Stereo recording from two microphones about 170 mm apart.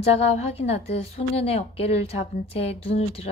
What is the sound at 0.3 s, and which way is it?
A woman's voice, 35° left (ahead or behind).